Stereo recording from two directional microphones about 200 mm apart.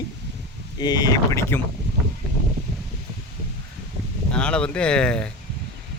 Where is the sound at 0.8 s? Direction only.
20° left (ahead or behind).